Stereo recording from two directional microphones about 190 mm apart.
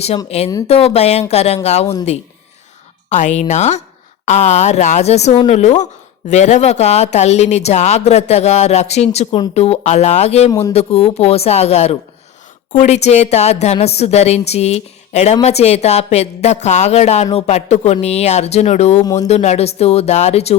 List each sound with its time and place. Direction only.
0.3 s speech: 35° left (ahead or behind)